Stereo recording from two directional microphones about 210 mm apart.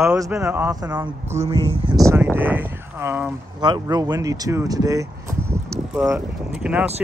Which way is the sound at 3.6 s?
20° right (ahead or behind).